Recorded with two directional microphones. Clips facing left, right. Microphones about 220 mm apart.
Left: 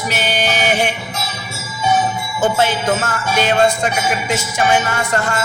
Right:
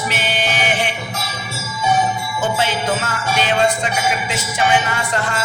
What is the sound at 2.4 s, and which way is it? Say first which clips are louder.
Jingle bell: left 5 dB; 45° left (ahead or behind).